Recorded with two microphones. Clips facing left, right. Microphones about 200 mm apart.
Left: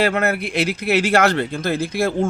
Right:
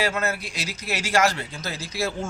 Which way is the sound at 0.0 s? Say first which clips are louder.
Left 7 dB; 60° left (ahead or behind).